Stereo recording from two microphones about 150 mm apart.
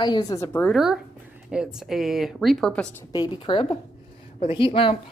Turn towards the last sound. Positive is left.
turn(degrees=35)  # may be behind; listen again after turning